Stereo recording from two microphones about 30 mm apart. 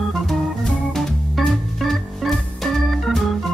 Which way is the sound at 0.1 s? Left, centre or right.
Centre.